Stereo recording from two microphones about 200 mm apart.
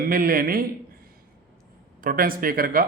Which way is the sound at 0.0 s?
45° right (ahead or behind).